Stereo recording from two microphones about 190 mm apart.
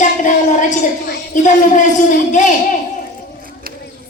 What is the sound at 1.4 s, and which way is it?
A man's voice, 40° left (ahead or behind).